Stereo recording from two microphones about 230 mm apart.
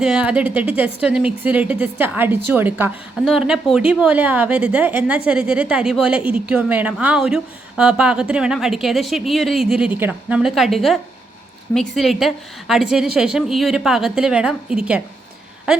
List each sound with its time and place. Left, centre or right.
0.0 s a woman's voice: centre